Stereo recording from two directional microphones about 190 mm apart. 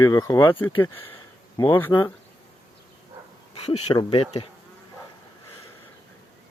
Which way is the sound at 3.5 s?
30° left (ahead or behind).